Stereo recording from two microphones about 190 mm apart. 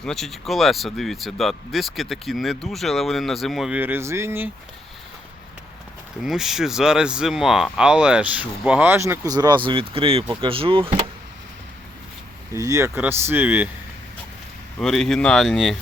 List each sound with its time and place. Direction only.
0.0 s speech: centre (ahead or behind)
6.2 s speech: centre (ahead or behind); by 11.0 s 30° right (ahead or behind)
12.5 s speech: 15° right (ahead or behind)
14.8 s speech: centre (ahead or behind)